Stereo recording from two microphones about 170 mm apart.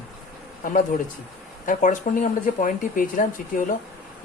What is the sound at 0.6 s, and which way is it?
Speech, 50° left (ahead or behind).